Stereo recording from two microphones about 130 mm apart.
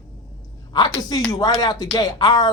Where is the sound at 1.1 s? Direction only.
35° left (ahead or behind).